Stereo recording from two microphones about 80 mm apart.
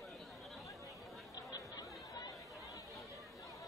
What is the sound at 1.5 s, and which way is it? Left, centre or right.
Chatter, left.